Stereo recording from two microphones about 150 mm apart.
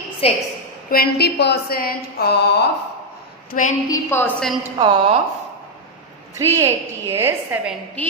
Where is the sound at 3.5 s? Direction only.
60° left (ahead or behind).